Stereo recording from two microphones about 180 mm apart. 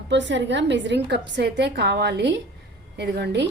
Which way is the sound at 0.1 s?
85° right.